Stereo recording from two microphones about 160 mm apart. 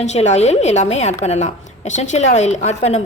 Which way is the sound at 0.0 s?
45° left (ahead or behind).